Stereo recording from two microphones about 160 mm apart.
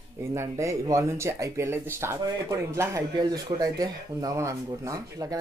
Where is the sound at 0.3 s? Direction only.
20° right (ahead or behind).